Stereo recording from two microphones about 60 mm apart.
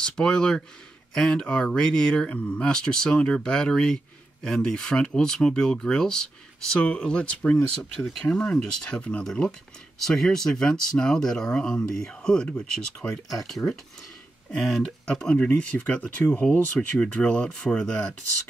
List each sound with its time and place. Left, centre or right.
0.0 s speech: centre
2.2 s speech: left